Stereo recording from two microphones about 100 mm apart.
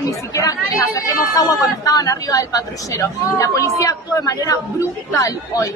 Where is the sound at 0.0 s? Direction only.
35° left (ahead or behind).